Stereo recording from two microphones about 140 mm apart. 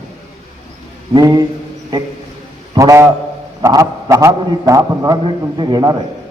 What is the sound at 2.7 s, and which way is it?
A man's voice, 20° right (ahead or behind).